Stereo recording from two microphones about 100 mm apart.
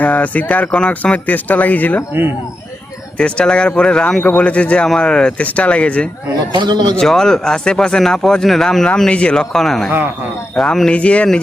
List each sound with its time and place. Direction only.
0.0 s speech: 15° left (ahead or behind)
3.2 s speech: 10° left (ahead or behind)
6.6 s speech: 45° right (ahead or behind)
6.9 s speech: 5° left (ahead or behind)